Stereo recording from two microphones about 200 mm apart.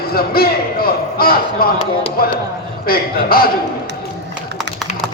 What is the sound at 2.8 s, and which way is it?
Speech, 45° left (ahead or behind).